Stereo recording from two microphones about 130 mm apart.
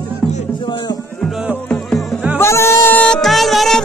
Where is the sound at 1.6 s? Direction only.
10° left (ahead or behind).